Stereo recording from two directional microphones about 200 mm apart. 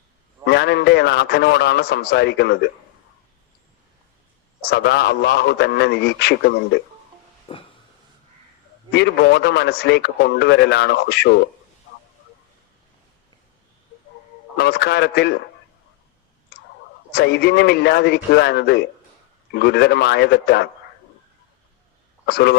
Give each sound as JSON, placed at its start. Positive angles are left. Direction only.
{"t": 0.4, "sound": "a man's voice", "side_deg": 55}
{"t": 4.7, "sound": "a man's voice", "side_deg": 55}
{"t": 7.5, "sound": "a sound", "side_deg": 30}
{"t": 8.9, "sound": "a man's voice", "side_deg": 55}
{"t": 14.5, "sound": "a man's voice", "side_deg": 55}
{"t": 17.1, "sound": "a man's voice", "side_deg": 55}
{"t": 22.3, "sound": "a man's voice", "side_deg": 55}